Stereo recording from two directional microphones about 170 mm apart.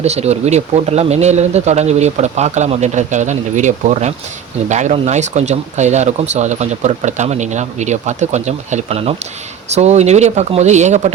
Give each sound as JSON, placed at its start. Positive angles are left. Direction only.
{"t": 0.0, "sound": "speech", "side_deg": -40}